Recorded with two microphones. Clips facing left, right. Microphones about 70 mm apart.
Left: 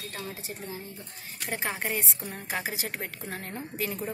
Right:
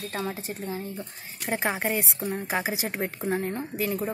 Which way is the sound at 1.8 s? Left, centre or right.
Centre.